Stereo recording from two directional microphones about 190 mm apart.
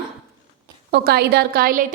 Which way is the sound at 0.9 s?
55° right (ahead or behind).